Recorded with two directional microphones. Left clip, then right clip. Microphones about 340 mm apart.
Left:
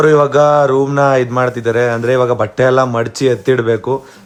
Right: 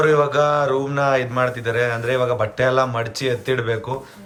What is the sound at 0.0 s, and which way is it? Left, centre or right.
Speech, centre.